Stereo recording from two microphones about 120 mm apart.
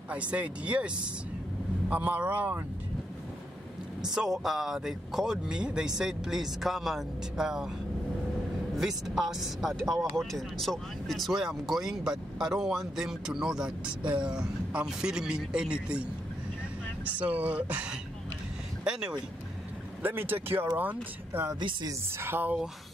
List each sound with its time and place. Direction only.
0.1 s speech: 10° right (ahead or behind)
4.1 s speech: 5° right (ahead or behind)
8.7 s speech: 5° right (ahead or behind)
17.0 s speech: 10° right (ahead or behind)
20.0 s speech: 15° right (ahead or behind)
21.5 s a woman's voice: 40° right (ahead or behind)
22.2 s speech: 15° right (ahead or behind)